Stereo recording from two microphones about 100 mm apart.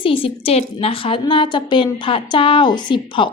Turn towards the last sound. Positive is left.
turn(degrees=55)  # may be behind; listen again after turning